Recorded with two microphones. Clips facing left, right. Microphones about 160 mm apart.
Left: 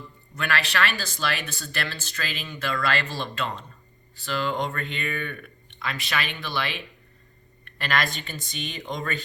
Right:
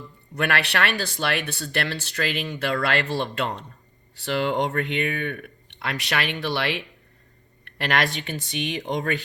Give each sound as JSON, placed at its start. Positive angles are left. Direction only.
{"t": 0.3, "sound": "speech", "side_deg": -60}